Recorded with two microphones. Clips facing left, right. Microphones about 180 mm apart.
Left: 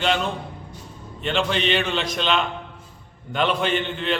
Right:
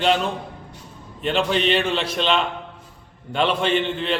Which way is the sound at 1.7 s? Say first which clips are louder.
Right 2 dB; 35° right (ahead or behind).